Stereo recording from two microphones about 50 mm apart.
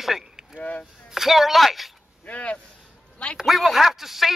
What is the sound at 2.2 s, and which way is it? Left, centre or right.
Speech, left.